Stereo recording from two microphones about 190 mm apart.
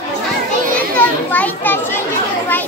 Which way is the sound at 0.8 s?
10° left (ahead or behind).